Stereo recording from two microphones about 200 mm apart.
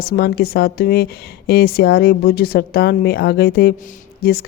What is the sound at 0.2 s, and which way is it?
Speech, 50° left (ahead or behind).